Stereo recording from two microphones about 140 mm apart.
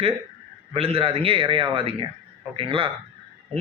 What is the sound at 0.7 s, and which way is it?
A man's voice, 45° right (ahead or behind).